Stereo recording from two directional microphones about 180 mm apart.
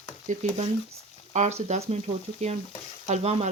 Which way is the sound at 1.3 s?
40° right (ahead or behind).